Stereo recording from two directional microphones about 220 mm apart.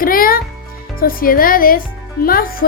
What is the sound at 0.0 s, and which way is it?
A woman's voice, 40° left (ahead or behind).